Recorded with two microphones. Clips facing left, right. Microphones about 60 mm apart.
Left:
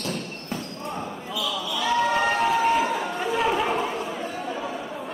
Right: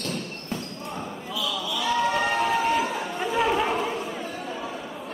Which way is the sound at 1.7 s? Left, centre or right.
Centre.